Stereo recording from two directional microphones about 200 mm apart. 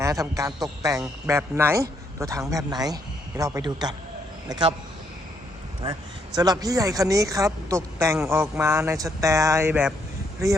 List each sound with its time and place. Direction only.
0.0 s a man's voice: 15° right (ahead or behind)
5.8 s a man's voice: 20° right (ahead or behind)